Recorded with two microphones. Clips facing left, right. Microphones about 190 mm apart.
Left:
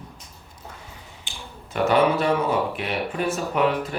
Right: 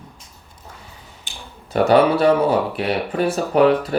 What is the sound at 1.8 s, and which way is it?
Speech, 35° right (ahead or behind).